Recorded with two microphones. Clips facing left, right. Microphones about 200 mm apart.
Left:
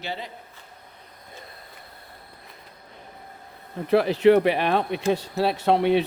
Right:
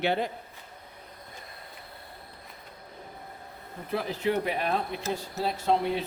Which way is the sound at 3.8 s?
75° left (ahead or behind).